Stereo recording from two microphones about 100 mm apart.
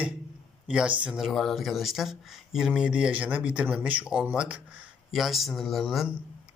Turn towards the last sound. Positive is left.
turn(degrees=0)  # may be behind; listen again after turning